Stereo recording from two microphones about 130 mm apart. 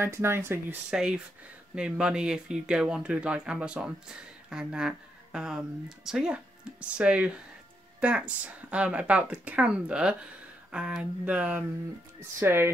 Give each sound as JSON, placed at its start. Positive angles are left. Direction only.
{"t": 0.0, "sound": "speech", "side_deg": -20}
{"t": 0.8, "sound": "speech", "side_deg": -5}